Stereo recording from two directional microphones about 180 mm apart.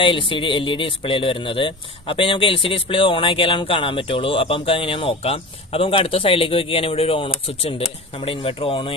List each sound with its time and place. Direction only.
0.0 s speech: 25° left (ahead or behind)